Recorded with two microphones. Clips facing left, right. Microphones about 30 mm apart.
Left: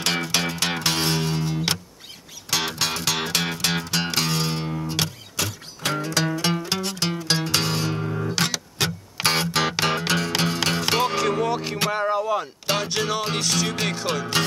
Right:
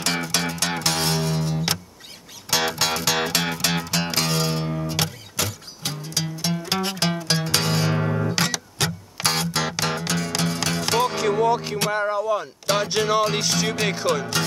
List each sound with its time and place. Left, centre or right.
0.0 s music: left
2.8 s music: centre
5.9 s music: left
7.2 s music: centre
7.9 s music: right
8.3 s music: centre
8.8 s music: left
11.1 s music: centre
11.9 s a sound: centre
12.7 s music: centre
14.0 s speech: centre